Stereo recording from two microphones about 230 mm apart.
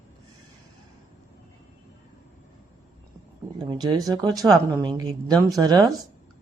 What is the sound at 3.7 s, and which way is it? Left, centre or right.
Speech, centre.